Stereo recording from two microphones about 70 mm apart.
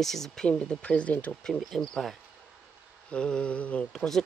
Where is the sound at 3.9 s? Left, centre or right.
Centre.